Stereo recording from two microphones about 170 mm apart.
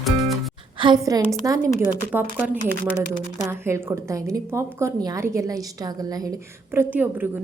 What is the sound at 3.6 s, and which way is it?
A woman's voice, 15° right (ahead or behind).